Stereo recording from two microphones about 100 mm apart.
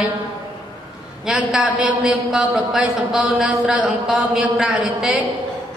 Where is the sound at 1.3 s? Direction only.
15° right (ahead or behind).